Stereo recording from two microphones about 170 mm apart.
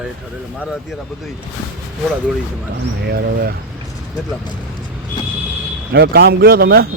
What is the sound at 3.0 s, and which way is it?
Speech, 65° right (ahead or behind).